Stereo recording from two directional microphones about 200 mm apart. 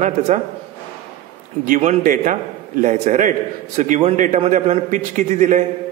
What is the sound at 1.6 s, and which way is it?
A man's voice, 40° right (ahead or behind).